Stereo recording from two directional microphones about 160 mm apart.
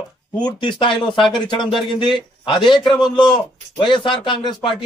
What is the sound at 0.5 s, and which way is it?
A man's voice, 30° left (ahead or behind).